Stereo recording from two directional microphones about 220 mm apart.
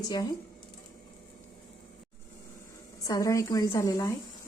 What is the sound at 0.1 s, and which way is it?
Speech, 15° left (ahead or behind).